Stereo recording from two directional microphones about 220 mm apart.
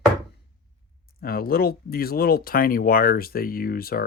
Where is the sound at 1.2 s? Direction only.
40° left (ahead or behind).